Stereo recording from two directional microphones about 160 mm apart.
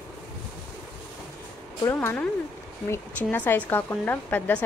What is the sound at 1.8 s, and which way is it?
Speech, 15° left (ahead or behind).